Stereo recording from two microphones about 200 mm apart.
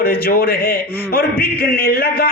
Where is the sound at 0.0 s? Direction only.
50° left (ahead or behind).